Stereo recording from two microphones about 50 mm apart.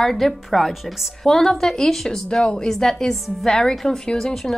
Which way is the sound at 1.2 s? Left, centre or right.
Centre.